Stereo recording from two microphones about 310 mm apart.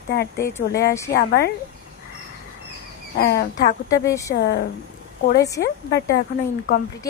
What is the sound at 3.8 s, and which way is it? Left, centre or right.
Speech, centre.